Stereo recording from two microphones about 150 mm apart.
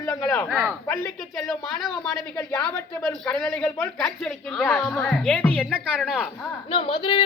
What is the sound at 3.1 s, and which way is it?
Speech, 5° left (ahead or behind).